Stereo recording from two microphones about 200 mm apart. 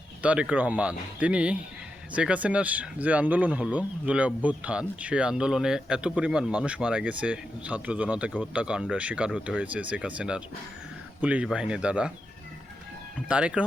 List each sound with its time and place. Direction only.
0.2 s speech: 5° right (ahead or behind)
13.1 s speech: 5° right (ahead or behind)